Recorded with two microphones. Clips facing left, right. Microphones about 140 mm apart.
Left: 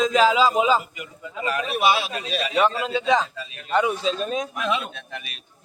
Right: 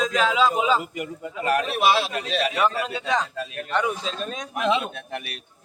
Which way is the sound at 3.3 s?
55° right (ahead or behind).